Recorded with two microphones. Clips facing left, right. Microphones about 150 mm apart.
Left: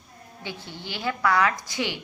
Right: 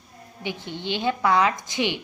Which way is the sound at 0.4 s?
20° right (ahead or behind).